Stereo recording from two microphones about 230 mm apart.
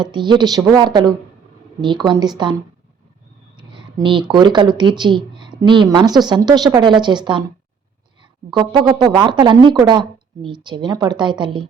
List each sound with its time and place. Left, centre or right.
0.0 s speech: centre
3.5 s speech: centre